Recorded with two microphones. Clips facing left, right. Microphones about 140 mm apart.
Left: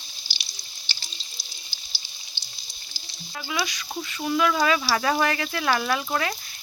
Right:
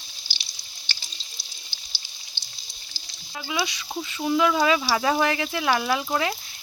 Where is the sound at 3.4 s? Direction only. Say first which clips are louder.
Right 1 dB; 20° right (ahead or behind).